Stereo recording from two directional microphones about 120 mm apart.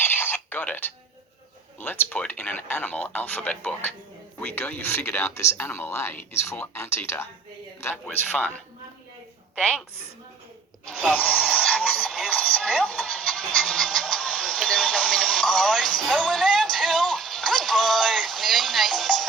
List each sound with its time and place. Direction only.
0.0 s a sound: 15° left (ahead or behind)
1.8 s speech: 15° left (ahead or behind)
9.6 s a woman's voice: 5° right (ahead or behind)
11.2 s radio: 5° right (ahead or behind)